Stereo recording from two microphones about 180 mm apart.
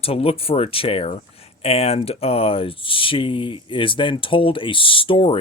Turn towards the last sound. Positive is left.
turn(degrees=30)  # may be behind; listen again after turning